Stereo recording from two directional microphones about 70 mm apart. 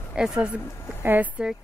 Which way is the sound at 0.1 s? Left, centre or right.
Centre.